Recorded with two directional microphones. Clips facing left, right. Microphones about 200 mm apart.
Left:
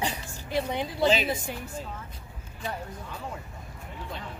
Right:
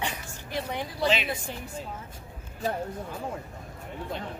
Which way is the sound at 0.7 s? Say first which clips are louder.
Left 2 dB; 20° left (ahead or behind).